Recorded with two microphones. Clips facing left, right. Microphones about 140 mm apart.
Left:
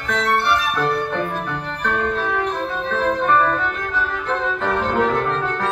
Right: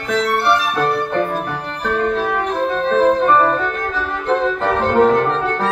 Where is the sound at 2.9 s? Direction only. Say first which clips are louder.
Right 5 dB; 35° right (ahead or behind).